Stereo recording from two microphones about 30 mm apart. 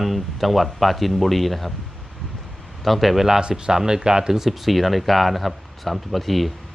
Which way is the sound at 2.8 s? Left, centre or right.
Centre.